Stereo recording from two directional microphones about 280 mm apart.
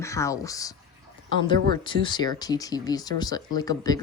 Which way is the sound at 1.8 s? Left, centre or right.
Centre.